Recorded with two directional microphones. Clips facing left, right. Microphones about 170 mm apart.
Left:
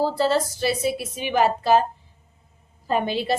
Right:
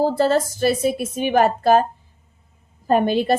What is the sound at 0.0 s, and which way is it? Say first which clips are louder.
Speech: right 3 dB; 50° right (ahead or behind).